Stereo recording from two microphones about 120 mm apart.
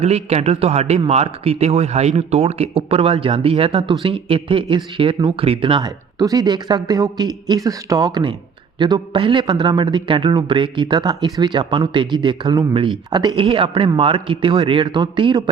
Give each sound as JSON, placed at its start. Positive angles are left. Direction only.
{"t": 0.0, "sound": "a man's voice", "side_deg": -65}
{"t": 6.1, "sound": "a man's voice", "side_deg": -30}